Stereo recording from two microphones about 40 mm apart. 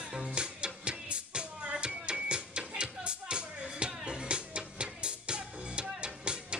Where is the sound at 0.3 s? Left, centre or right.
Right.